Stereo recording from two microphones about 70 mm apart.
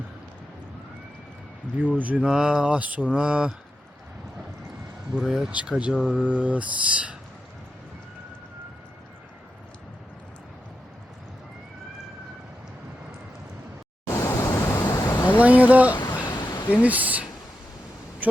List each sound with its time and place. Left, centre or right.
1.8 s speech: right
2.2 s mantra: centre
5.2 s speech: centre
5.5 s mantra: centre
6.1 s speech: right
14.3 s pink noise: left
14.5 s a sound: left
14.8 s a sound: left
15.4 s speech: right
16.2 s a sound: left
16.8 s speech: right